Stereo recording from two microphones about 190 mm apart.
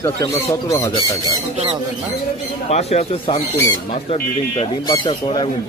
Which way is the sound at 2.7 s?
35° left (ahead or behind).